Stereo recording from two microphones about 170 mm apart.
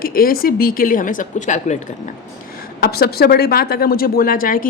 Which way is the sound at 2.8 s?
65° left (ahead or behind).